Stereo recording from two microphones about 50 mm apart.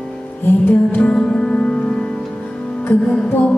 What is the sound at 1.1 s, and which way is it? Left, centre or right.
Music, centre.